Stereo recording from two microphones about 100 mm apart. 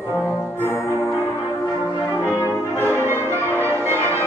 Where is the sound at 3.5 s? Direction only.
25° right (ahead or behind).